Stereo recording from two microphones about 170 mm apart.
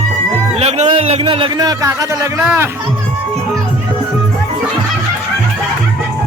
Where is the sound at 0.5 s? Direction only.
40° right (ahead or behind); by 2.3 s 20° right (ahead or behind).